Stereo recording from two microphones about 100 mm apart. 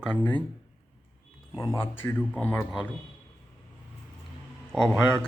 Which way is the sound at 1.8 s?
25° left (ahead or behind).